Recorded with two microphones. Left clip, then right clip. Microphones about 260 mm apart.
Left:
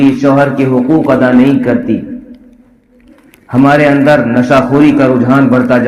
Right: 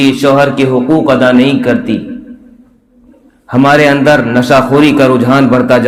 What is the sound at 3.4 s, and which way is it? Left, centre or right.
A man's voice, right.